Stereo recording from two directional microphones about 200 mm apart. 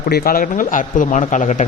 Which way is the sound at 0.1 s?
45° left (ahead or behind).